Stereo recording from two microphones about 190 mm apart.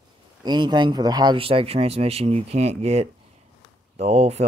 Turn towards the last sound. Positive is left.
turn(degrees=-35)  # may be behind; listen again after turning